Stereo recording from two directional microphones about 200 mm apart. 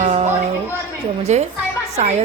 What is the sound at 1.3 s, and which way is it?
Speech, 35° right (ahead or behind).